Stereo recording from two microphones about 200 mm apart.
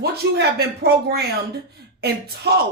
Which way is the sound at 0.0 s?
55° right (ahead or behind).